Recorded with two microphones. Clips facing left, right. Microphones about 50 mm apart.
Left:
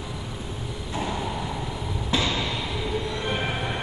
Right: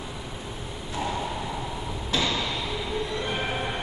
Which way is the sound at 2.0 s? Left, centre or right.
Centre.